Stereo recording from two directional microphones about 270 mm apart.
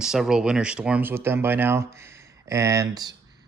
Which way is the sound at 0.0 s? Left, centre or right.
Centre.